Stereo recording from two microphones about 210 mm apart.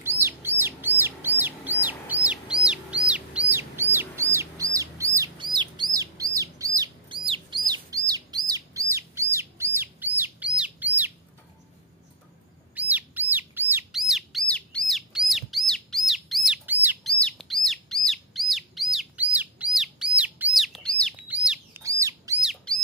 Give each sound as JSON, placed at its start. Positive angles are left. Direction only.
{"t": 0.0, "sound": "bird", "side_deg": -10}
{"t": 1.4, "sound": "chicken", "side_deg": -10}
{"t": 4.7, "sound": "bird", "side_deg": -15}
{"t": 12.7, "sound": "bird", "side_deg": -5}
{"t": 17.2, "sound": "bird", "side_deg": 5}
{"t": 22.4, "sound": "bird", "side_deg": 0}